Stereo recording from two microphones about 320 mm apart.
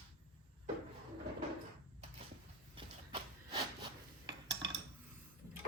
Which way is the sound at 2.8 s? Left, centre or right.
Centre.